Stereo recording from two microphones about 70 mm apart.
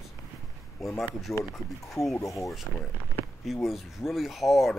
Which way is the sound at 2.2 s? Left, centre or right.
Left.